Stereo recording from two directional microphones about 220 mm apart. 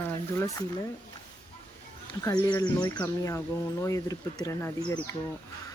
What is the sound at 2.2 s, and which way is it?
Speech, 15° left (ahead or behind).